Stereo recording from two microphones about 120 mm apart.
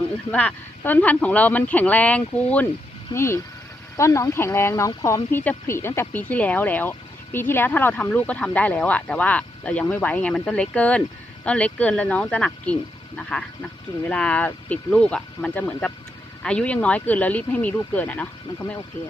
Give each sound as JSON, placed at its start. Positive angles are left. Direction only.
{"t": 0.3, "sound": "speech", "side_deg": 15}
{"t": 3.1, "sound": "speech", "side_deg": 20}